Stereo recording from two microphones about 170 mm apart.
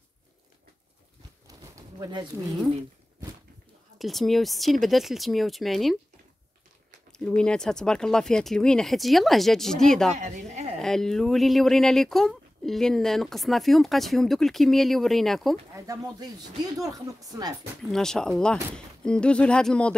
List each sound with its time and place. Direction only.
1.5 s a sound: 25° right (ahead or behind)
4.0 s speech: centre (ahead or behind)
7.1 s speech: 5° left (ahead or behind)
10.1 s speech: 45° right (ahead or behind)
10.8 s speech: centre (ahead or behind)
15.7 s speech: 20° right (ahead or behind)
17.9 s speech: 5° left (ahead or behind)